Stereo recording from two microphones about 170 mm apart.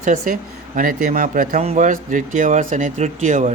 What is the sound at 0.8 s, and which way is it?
Speech, 55° right (ahead or behind).